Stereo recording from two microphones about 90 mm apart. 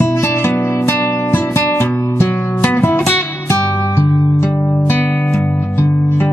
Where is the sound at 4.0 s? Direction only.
25° left (ahead or behind).